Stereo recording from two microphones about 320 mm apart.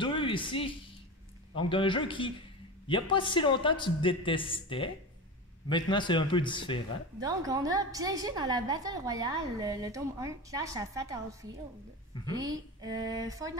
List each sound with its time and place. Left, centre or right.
0.0 s a man's voice: centre
7.2 s a woman's voice: centre
12.8 s a woman's voice: centre